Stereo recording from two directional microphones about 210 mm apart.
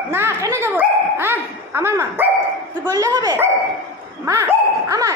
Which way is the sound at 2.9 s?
15° right (ahead or behind).